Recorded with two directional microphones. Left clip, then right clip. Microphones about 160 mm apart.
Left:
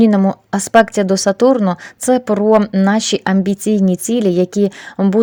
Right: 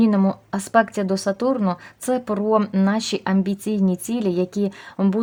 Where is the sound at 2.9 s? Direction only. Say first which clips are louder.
Left 7 dB; 30° left (ahead or behind).